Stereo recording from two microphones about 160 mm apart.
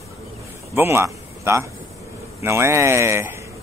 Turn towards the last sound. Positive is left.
turn(degrees=-15)  # may be behind; listen again after turning